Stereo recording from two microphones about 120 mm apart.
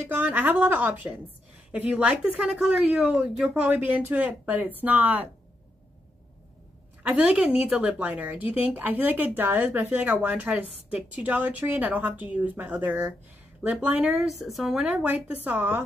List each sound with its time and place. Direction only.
0.1 s a woman's voice: 15° right (ahead or behind)
7.0 s a woman's voice: 10° right (ahead or behind)